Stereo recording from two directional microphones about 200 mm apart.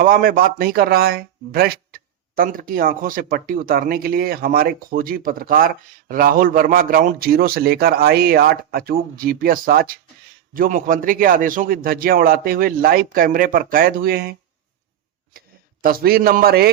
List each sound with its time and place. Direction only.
0.0 s speech: 45° right (ahead or behind)
15.8 s speech: 45° right (ahead or behind)